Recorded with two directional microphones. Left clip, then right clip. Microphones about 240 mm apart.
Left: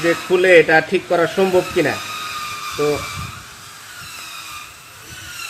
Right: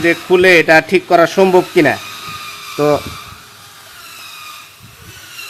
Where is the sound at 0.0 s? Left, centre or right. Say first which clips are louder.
Right 5 dB; right.